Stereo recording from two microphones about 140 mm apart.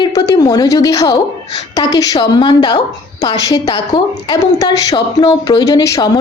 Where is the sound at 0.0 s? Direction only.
25° left (ahead or behind).